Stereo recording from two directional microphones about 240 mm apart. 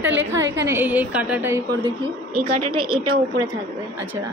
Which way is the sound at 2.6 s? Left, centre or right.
Right.